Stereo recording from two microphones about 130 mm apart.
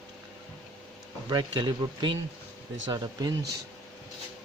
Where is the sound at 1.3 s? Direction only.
35° right (ahead or behind).